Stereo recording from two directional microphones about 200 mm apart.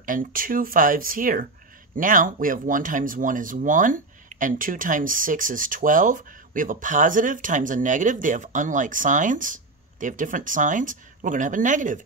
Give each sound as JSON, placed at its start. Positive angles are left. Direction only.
{"t": 0.0, "sound": "speech", "side_deg": -45}